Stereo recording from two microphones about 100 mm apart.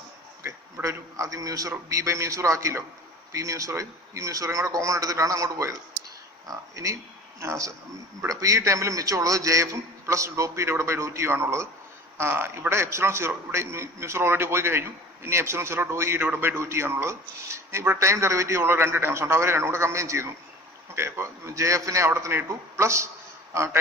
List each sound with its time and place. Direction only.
0.4 s a man's voice: 25° right (ahead or behind)